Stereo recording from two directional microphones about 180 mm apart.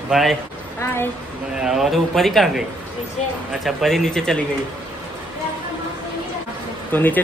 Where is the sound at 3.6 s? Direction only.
Centre (ahead or behind).